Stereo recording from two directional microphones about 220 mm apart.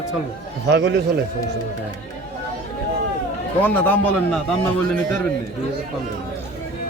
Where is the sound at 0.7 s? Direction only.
50° right (ahead or behind).